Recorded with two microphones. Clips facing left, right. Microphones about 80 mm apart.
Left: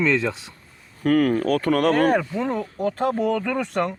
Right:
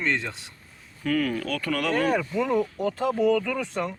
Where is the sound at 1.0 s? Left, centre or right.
Left.